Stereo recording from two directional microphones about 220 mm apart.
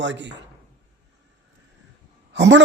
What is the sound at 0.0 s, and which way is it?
Speech, 55° right (ahead or behind).